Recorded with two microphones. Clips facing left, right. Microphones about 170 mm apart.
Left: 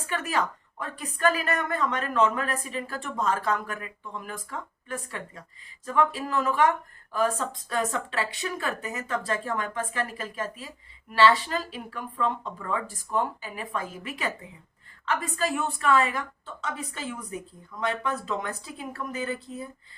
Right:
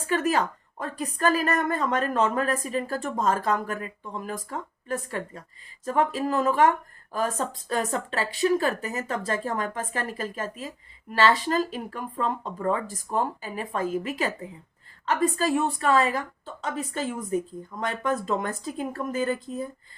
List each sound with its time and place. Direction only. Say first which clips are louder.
0.1 s a woman's voice: right 5 dB; 40° right (ahead or behind)